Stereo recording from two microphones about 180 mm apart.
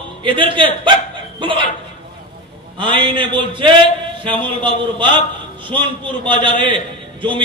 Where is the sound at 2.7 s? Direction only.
25° right (ahead or behind).